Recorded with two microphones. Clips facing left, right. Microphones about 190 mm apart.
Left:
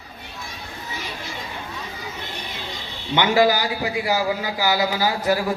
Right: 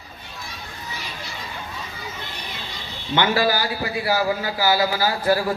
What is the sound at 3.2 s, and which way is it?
A man's voice, 20° left (ahead or behind).